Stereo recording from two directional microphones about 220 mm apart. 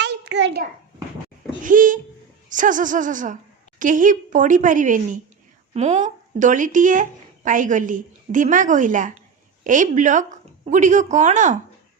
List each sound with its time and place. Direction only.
0.0 s hands: 50° right (ahead or behind)
1.6 s a sound: 40° right (ahead or behind)
2.5 s a woman's voice: 35° right (ahead or behind)